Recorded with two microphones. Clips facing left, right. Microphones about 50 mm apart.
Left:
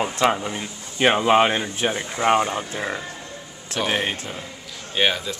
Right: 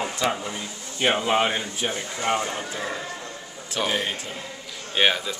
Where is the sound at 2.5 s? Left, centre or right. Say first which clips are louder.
Left 3 dB; left.